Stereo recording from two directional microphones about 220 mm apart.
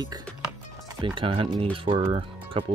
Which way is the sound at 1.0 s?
25° right (ahead or behind).